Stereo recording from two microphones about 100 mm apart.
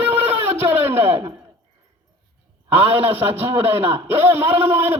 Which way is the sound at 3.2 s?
20° right (ahead or behind).